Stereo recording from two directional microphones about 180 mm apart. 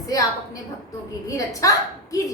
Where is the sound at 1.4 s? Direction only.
20° left (ahead or behind).